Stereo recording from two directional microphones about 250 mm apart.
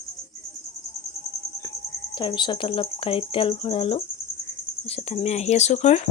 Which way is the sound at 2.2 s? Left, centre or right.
Centre.